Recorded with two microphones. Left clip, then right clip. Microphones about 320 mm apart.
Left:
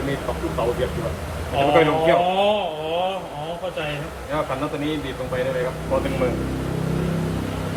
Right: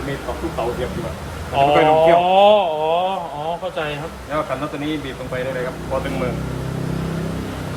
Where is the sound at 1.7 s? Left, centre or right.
Centre.